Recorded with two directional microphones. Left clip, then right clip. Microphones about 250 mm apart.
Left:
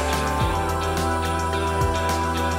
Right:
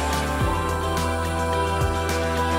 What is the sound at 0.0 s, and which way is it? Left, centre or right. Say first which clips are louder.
Music: left 1 dB; centre.